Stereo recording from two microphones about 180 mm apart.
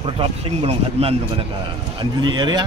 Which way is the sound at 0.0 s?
30° right (ahead or behind).